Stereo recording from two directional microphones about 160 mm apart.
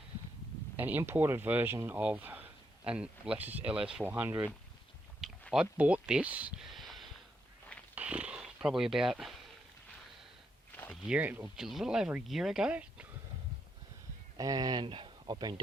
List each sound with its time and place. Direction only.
0.8 s speech: 10° right (ahead or behind)
5.4 s a sound: centre (ahead or behind)
5.7 s speech: 10° right (ahead or behind)
7.9 s a sound: 10° right (ahead or behind)
11.1 s speech: 10° right (ahead or behind)
14.3 s speech: 25° right (ahead or behind)